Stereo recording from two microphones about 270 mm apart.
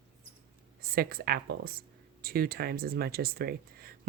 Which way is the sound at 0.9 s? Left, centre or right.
Right.